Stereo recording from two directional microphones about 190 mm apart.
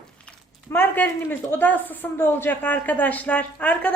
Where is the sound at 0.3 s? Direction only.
10° left (ahead or behind).